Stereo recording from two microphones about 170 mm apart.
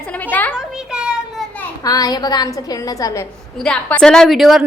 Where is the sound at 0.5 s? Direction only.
5° right (ahead or behind).